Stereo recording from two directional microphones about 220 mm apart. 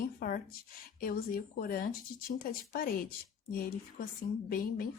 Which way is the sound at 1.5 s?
45° left (ahead or behind).